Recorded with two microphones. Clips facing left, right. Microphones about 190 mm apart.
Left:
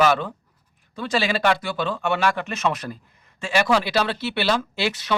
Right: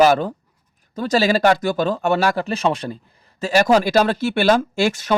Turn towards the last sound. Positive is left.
turn(degrees=-45)  # may be behind; listen again after turning